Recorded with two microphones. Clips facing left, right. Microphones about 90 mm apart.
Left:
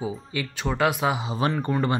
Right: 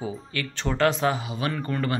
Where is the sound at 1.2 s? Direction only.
25° left (ahead or behind).